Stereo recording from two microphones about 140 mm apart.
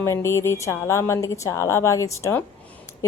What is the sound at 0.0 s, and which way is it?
Speech, 20° left (ahead or behind).